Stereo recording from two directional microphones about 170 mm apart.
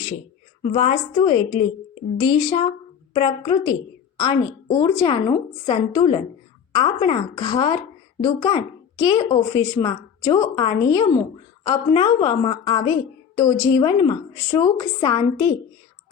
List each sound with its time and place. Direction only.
0.6 s a woman's voice: 40° left (ahead or behind); by 15.4 s 25° left (ahead or behind)